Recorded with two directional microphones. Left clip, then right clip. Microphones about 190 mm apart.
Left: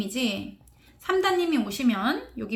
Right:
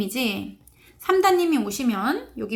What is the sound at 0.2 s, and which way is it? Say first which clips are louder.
Speech: right 2 dB; 35° right (ahead or behind).